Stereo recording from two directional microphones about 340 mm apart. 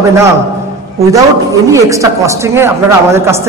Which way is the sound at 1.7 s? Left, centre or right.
Centre.